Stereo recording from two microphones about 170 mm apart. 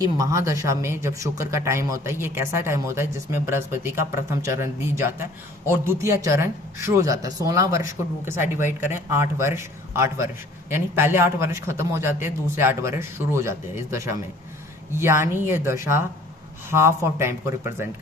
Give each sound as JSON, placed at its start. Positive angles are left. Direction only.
{"t": 0.0, "sound": "speech", "side_deg": -20}